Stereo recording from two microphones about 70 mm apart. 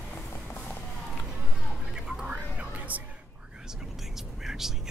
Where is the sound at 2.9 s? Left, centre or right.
Right.